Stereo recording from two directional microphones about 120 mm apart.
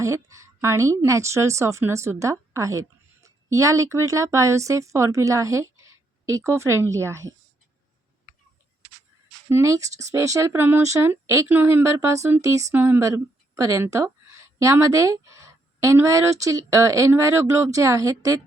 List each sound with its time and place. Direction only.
0.0 s speech: 25° right (ahead or behind)
9.5 s speech: 25° right (ahead or behind)